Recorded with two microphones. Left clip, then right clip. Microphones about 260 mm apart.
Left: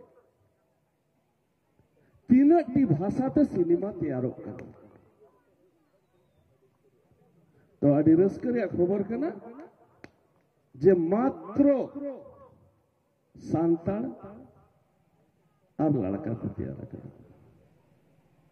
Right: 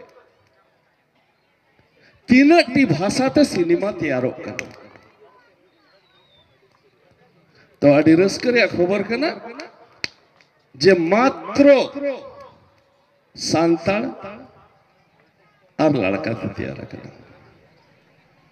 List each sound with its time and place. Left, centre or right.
2.2 s a man's voice: right
7.8 s a man's voice: right
10.8 s a man's voice: right
13.4 s a man's voice: right
15.7 s a sound: right
16.3 s a man's voice: right